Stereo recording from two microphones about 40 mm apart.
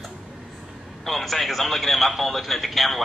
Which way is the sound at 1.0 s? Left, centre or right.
Centre.